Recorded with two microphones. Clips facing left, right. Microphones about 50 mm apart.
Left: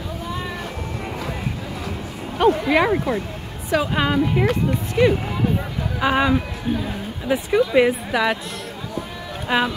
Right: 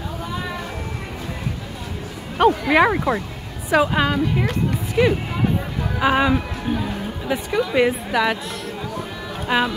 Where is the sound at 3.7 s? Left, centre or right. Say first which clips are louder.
Right 3 dB; centre.